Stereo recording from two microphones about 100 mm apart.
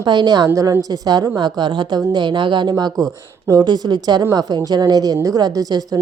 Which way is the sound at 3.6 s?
45° right (ahead or behind).